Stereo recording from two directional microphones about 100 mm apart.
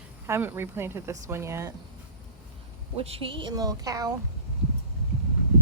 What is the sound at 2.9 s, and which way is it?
Speech, 75° right (ahead or behind).